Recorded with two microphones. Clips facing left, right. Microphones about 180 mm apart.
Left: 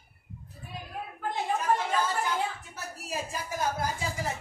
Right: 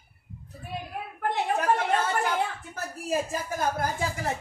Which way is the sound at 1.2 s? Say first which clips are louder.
Right 4 dB; 70° right (ahead or behind).